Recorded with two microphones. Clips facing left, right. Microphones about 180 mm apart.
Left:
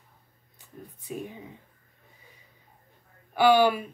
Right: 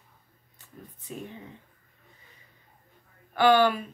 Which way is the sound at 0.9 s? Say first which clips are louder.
Left 3 dB; 10° left (ahead or behind).